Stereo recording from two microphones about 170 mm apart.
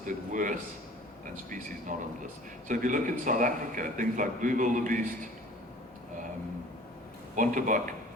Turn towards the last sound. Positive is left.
turn(degrees=-50)  # may be behind; listen again after turning